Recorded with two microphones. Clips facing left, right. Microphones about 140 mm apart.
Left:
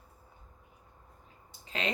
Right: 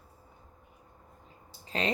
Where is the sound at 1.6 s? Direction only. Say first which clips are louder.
Right 3 dB; 35° right (ahead or behind).